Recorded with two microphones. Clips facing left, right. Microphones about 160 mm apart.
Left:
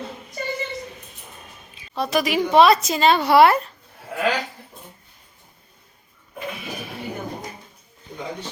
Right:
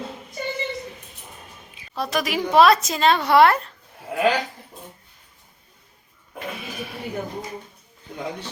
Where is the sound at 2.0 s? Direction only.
Centre (ahead or behind).